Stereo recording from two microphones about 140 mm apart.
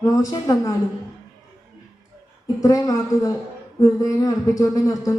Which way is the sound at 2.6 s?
25° left (ahead or behind).